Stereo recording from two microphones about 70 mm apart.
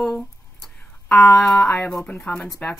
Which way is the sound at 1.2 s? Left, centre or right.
Centre.